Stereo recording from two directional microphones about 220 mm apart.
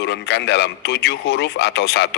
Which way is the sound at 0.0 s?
50° left (ahead or behind).